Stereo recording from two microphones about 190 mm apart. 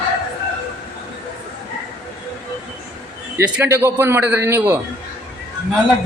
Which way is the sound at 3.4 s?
15° right (ahead or behind).